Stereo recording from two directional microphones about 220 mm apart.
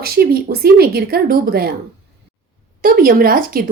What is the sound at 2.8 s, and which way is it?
Speech, 40° right (ahead or behind).